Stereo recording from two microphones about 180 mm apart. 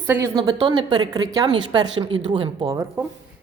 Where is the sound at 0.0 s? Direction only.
15° right (ahead or behind).